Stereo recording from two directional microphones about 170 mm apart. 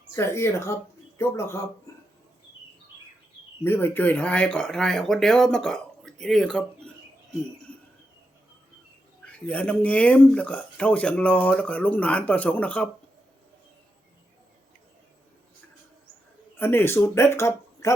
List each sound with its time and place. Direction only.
0.2 s speech: 15° left (ahead or behind)
3.6 s speech: 15° left (ahead or behind)
9.2 s speech: 5° left (ahead or behind)
16.6 s speech: 15° left (ahead or behind)